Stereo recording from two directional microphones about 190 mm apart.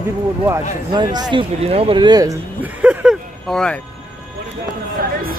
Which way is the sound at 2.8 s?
Centre (ahead or behind).